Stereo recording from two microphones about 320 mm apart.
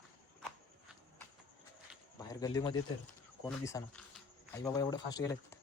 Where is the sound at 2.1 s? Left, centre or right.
Centre.